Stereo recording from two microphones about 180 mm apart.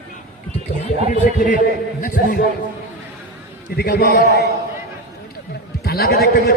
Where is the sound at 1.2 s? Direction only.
45° left (ahead or behind).